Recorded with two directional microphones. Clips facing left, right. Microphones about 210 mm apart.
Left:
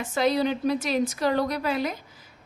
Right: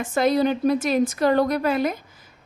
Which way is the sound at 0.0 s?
50° right (ahead or behind).